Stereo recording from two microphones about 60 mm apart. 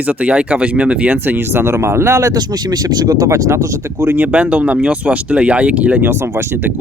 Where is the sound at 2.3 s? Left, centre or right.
Right.